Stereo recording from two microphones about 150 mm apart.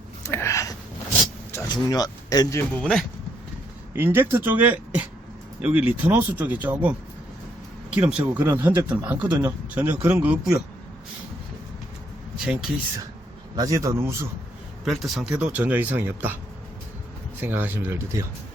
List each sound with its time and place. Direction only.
0.2 s a sound: 20° left (ahead or behind)
1.6 s speech: 25° left (ahead or behind)
2.6 s speech: 5° left (ahead or behind)
3.9 s speech: 15° right (ahead or behind)
7.9 s speech: 10° right (ahead or behind)
13.6 s a man's voice: 20° right (ahead or behind)
14.8 s speech: centre (ahead or behind)
17.4 s speech: 10° right (ahead or behind)